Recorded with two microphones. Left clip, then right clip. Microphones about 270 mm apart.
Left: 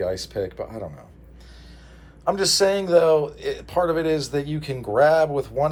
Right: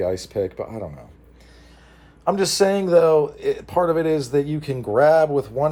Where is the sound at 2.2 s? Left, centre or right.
Right.